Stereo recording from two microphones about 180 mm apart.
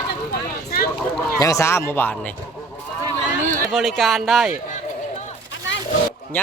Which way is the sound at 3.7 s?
Centre (ahead or behind).